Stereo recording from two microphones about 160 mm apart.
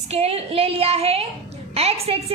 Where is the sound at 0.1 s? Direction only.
40° right (ahead or behind).